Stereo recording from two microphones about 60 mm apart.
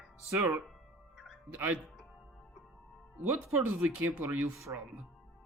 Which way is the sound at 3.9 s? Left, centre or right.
Right.